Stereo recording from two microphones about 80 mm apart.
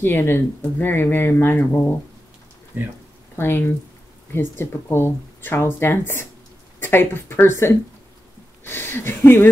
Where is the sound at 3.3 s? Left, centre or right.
Left.